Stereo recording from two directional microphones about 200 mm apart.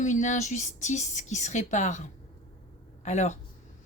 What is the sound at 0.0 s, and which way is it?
A woman's voice, 40° left (ahead or behind).